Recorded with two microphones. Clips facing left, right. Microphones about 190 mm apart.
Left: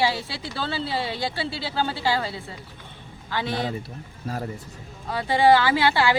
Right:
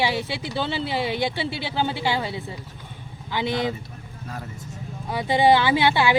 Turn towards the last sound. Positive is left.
turn(degrees=-20)  # may be behind; listen again after turning